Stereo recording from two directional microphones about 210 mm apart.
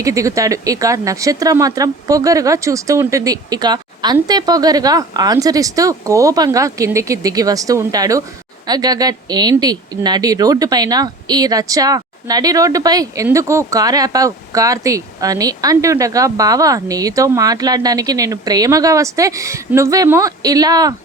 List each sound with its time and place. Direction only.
0.0 s speech: 15° right (ahead or behind)